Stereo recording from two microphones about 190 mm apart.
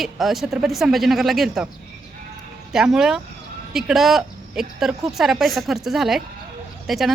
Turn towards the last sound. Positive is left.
turn(degrees=0)  # may be behind; listen again after turning